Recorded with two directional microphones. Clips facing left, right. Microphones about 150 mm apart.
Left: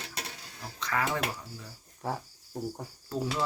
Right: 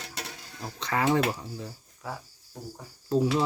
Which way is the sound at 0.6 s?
25° right (ahead or behind).